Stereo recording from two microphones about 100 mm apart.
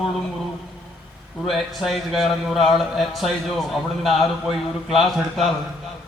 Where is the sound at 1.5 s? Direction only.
Centre (ahead or behind).